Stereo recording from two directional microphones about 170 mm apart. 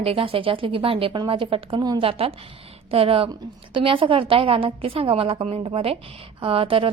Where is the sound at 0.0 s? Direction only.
35° right (ahead or behind).